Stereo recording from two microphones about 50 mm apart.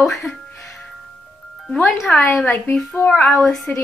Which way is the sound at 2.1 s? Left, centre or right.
Left.